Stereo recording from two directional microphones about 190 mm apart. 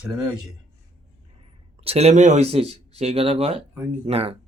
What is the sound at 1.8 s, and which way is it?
Speech, 30° right (ahead or behind).